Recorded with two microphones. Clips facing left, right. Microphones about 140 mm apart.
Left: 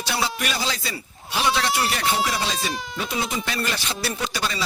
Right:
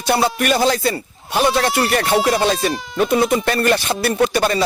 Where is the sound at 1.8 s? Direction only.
60° right (ahead or behind).